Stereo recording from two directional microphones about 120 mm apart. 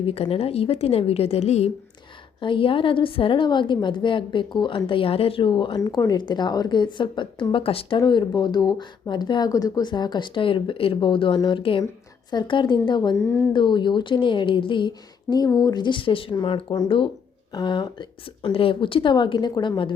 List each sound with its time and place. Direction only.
0.0 s a woman's voice: 55° left (ahead or behind)
2.4 s a woman's voice: 45° left (ahead or behind)
13.1 s a woman's voice: 20° left (ahead or behind)
13.5 s speech: 40° left (ahead or behind)